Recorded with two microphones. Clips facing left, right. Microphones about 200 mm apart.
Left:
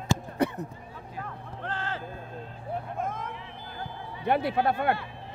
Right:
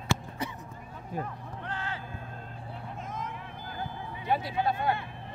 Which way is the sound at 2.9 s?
55° left (ahead or behind).